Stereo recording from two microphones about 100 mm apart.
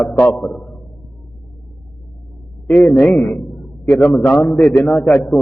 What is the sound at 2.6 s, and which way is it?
A man's voice, 10° left (ahead or behind).